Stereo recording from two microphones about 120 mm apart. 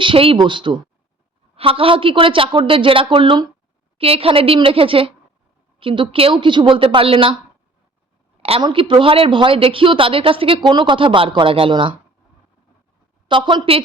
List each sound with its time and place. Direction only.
0.0 s speech: 50° right (ahead or behind)
3.9 s speech: 55° right (ahead or behind)
8.4 s a sound: 55° right (ahead or behind)
8.6 s speech: 45° right (ahead or behind)
13.2 s speech: 45° right (ahead or behind)